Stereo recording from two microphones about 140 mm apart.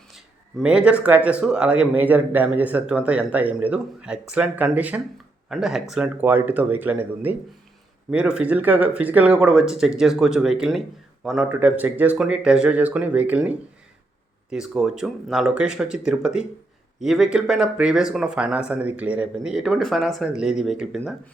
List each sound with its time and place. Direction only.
0.6 s speech: 5° right (ahead or behind)